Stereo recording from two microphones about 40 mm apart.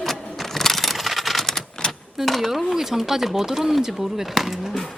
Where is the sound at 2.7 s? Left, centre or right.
Centre.